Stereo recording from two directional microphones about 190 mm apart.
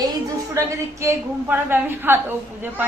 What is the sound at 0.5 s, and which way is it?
A woman's voice, 15° right (ahead or behind).